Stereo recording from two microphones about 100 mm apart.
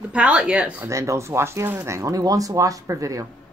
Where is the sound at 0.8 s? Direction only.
30° right (ahead or behind).